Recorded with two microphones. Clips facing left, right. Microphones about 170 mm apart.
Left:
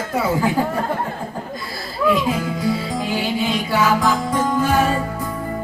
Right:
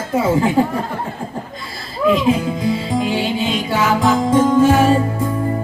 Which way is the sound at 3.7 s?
25° right (ahead or behind).